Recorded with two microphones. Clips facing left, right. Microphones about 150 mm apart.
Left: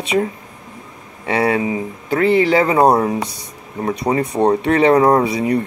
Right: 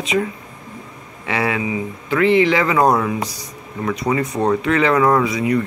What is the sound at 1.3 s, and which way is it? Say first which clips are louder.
Speech: left 4 dB; 35° left (ahead or behind).